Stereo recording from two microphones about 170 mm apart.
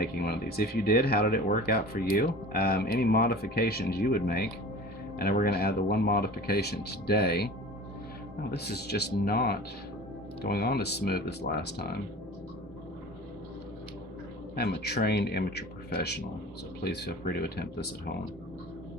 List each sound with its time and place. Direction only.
0.0 s speech: 65° left (ahead or behind)
14.5 s speech: 70° left (ahead or behind)